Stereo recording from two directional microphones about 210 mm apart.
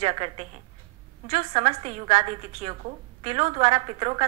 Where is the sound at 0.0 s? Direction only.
30° right (ahead or behind).